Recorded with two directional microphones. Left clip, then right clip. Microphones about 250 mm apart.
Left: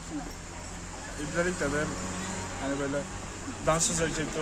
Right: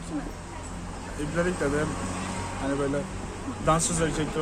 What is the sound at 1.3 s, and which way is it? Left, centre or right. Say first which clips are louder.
Speech: right 2 dB; centre.